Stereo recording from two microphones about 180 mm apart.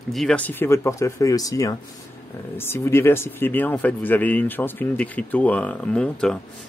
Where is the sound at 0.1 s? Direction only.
5° left (ahead or behind).